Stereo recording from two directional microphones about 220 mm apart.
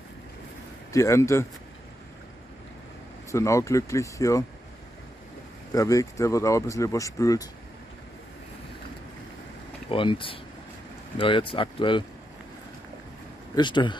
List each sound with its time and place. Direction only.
0.9 s speech: 15° left (ahead or behind)
3.3 s speech: 15° left (ahead or behind)
5.7 s speech: 15° left (ahead or behind)
9.8 s speech: 25° left (ahead or behind)
13.6 s speech: 20° left (ahead or behind)